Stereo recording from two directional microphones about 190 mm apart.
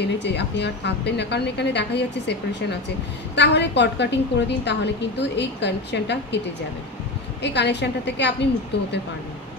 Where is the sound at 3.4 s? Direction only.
65° left (ahead or behind).